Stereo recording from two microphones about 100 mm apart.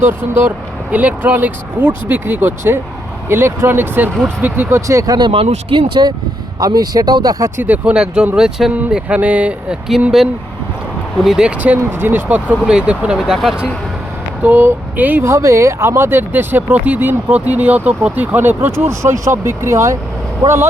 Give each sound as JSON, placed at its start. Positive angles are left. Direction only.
{"t": 0.0, "sound": "speech", "side_deg": -20}
{"t": 4.9, "sound": "speech", "side_deg": -30}
{"t": 5.1, "sound": "speech", "side_deg": -55}
{"t": 5.9, "sound": "speech", "side_deg": -45}
{"t": 7.5, "sound": "speech", "side_deg": -15}
{"t": 14.4, "sound": "speech", "side_deg": -20}
{"t": 15.2, "sound": "speech", "side_deg": -30}